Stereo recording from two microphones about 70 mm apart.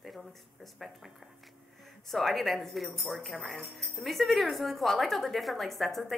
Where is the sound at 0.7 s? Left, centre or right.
Centre.